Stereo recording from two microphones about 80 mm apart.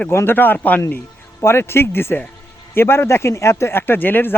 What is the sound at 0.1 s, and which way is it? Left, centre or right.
Speech, left.